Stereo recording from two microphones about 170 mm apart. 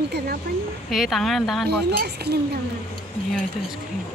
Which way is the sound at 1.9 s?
75° right (ahead or behind).